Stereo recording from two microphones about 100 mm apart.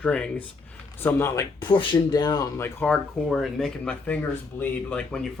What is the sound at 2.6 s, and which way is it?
Speech, 15° left (ahead or behind).